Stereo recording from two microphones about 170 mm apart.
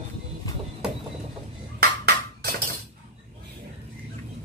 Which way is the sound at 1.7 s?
65° right (ahead or behind).